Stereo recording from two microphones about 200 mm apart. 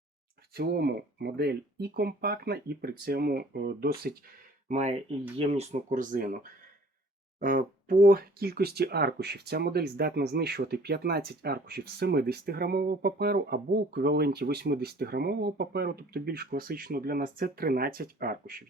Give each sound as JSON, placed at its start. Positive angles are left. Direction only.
{"t": 0.5, "sound": "speech", "side_deg": -50}
{"t": 4.7, "sound": "speech", "side_deg": -35}